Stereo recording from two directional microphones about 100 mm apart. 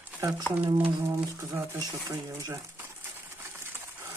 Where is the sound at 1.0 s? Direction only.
30° right (ahead or behind).